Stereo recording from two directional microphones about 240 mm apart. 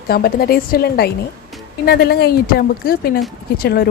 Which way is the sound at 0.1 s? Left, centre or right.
Left.